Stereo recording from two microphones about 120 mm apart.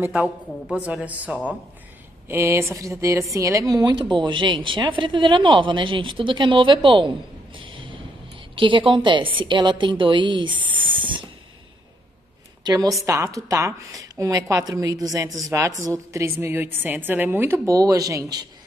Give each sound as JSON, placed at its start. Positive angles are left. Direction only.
{"t": 0.0, "sound": "a woman's voice", "side_deg": -10}
{"t": 7.5, "sound": "a sound", "side_deg": -45}
{"t": 8.5, "sound": "a woman's voice", "side_deg": -45}
{"t": 12.6, "sound": "a woman's voice", "side_deg": -30}